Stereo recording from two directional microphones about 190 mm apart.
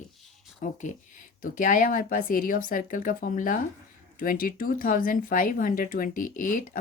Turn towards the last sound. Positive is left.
turn(degrees=45)  # may be behind; listen again after turning